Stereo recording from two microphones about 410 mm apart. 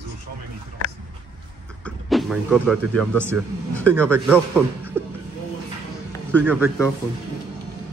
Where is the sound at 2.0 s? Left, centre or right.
Centre.